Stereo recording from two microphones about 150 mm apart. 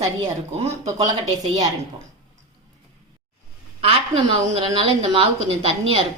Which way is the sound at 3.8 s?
40° right (ahead or behind).